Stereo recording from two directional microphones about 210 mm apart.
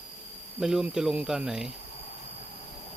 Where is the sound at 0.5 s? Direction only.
Centre (ahead or behind).